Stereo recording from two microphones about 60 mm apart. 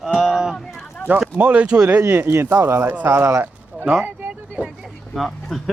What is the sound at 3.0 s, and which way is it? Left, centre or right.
Speech, right.